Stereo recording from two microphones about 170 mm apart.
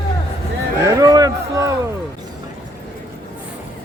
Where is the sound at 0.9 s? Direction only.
20° right (ahead or behind).